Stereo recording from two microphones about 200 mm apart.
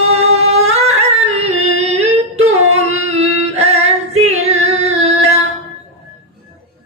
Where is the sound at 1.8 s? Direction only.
30° right (ahead or behind).